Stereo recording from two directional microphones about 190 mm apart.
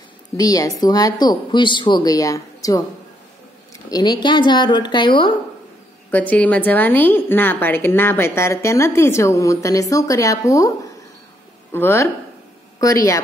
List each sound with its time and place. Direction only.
0.4 s speech: 20° left (ahead or behind)
6.1 s a woman's voice: 10° left (ahead or behind)
11.7 s a woman's voice: 10° left (ahead or behind)